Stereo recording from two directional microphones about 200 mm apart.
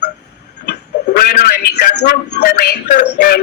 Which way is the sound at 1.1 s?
50° left (ahead or behind).